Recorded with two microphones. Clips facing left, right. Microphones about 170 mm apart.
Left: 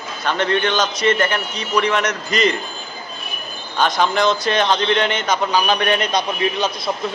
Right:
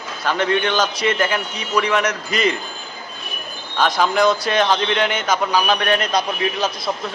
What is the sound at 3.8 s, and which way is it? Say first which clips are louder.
A man's voice: right 1 dB; 5° right (ahead or behind).